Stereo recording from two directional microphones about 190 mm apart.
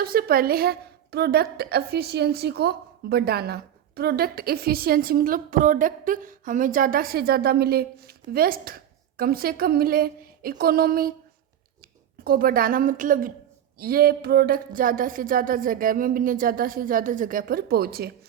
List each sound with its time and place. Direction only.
0.0 s a woman's voice: 50° right (ahead or behind)
12.2 s a woman's voice: 50° right (ahead or behind)